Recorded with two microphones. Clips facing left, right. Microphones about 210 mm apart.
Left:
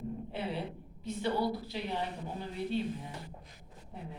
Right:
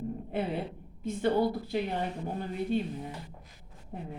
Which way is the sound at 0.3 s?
50° right (ahead or behind).